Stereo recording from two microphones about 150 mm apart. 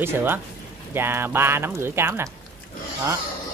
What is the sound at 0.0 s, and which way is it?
Speech, 15° right (ahead or behind).